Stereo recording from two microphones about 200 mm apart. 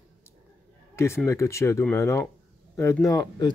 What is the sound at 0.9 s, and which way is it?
Speech, 15° left (ahead or behind).